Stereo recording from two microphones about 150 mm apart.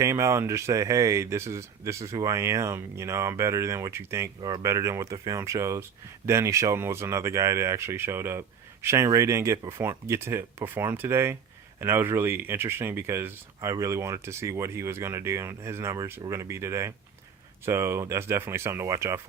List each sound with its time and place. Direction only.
0.0 s speech: 20° right (ahead or behind)